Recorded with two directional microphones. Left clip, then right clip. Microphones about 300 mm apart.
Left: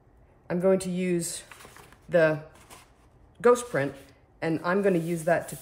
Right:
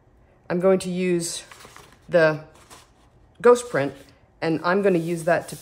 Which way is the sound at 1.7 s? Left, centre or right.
Centre.